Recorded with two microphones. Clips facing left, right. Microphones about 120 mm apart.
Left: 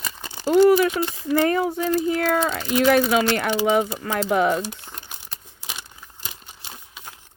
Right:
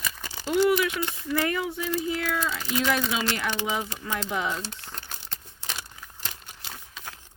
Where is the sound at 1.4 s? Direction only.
40° left (ahead or behind).